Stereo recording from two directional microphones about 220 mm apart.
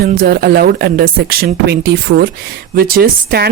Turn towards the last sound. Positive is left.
turn(degrees=-45)  # may be behind; listen again after turning